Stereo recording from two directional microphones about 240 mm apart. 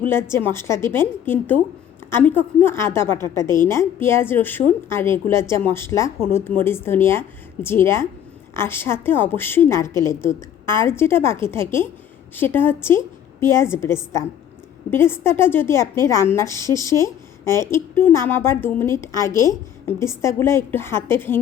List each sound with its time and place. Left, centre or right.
0.0 s a woman's voice: centre
19.3 s a woman's voice: centre
20.0 s a woman's voice: centre